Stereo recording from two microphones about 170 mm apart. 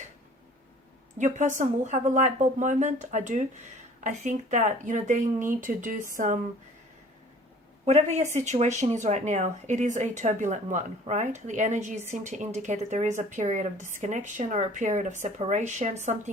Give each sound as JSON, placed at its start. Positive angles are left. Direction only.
{"t": 1.2, "sound": "speech", "side_deg": -45}
{"t": 7.9, "sound": "speech", "side_deg": -40}